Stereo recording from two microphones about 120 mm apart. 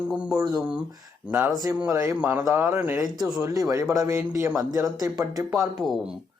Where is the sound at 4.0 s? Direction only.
25° right (ahead or behind).